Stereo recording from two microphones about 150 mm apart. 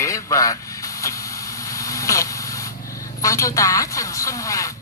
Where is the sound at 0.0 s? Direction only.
20° left (ahead or behind).